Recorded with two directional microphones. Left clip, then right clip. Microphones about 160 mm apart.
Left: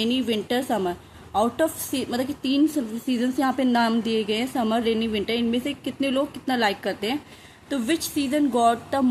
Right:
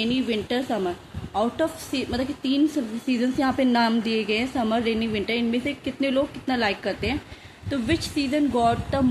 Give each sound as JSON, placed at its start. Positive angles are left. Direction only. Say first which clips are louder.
{"t": 0.0, "sound": "a woman's voice", "louder": "left 1 dB", "side_deg": 30}
{"t": 3.1, "sound": "a woman's voice", "louder": "even", "side_deg": 20}